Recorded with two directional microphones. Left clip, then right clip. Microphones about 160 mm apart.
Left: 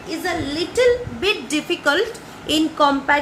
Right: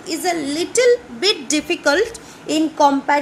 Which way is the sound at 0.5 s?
75° right (ahead or behind).